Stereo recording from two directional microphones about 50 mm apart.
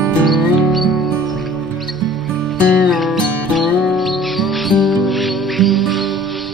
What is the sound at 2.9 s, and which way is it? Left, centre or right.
Music, centre.